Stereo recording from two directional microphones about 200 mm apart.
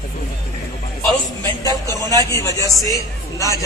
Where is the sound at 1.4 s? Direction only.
15° left (ahead or behind).